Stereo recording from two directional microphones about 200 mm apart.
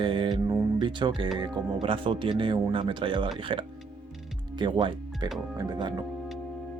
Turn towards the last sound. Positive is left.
turn(degrees=-20)  # may be behind; listen again after turning